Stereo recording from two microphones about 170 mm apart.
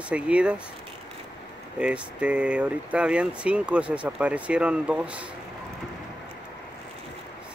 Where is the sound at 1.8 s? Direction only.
5° right (ahead or behind).